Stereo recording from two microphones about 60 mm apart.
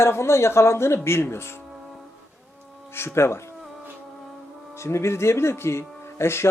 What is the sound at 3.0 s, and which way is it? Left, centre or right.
Speech, left.